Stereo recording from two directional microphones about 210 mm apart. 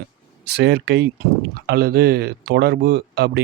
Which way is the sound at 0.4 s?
55° right (ahead or behind).